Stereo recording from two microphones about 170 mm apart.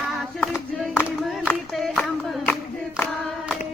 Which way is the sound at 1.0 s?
Centre (ahead or behind).